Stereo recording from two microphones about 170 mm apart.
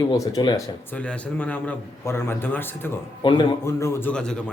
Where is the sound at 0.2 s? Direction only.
20° left (ahead or behind).